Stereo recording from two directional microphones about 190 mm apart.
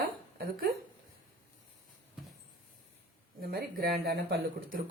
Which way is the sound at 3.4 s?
55° right (ahead or behind).